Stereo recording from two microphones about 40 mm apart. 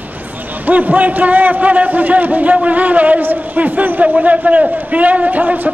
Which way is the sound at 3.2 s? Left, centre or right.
Right.